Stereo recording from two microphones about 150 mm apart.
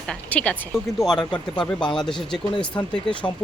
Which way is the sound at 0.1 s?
10° left (ahead or behind).